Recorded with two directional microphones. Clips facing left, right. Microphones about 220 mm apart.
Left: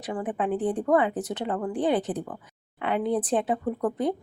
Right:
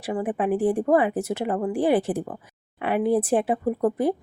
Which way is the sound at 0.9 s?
25° right (ahead or behind).